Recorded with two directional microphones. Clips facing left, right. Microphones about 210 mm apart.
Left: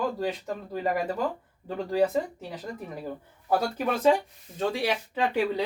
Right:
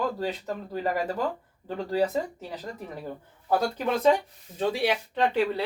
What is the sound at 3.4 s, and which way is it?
Speech, 10° left (ahead or behind).